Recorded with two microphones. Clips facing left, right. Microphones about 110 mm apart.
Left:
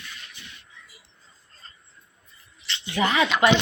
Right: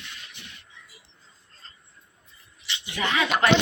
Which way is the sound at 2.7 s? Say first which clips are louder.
Left 2 dB; 15° right (ahead or behind).